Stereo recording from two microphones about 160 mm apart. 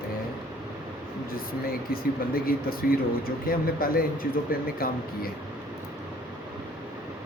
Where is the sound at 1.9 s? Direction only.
65° left (ahead or behind).